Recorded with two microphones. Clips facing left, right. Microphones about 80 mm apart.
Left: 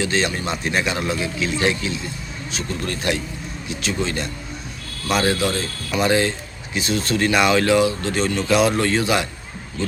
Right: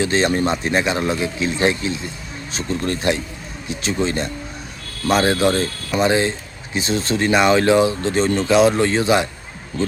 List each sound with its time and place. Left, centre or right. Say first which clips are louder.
0.0 s speech: right 4 dB; right
6.0 s speech: right 1 dB; right